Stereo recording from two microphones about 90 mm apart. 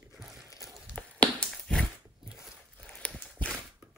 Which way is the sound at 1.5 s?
Centre (ahead or behind).